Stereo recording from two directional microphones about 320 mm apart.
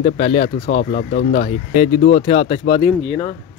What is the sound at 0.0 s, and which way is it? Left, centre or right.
Speech, left.